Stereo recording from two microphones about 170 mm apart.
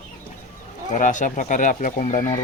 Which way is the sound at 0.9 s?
50° left (ahead or behind).